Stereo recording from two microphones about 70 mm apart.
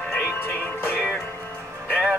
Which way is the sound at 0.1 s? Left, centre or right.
Left.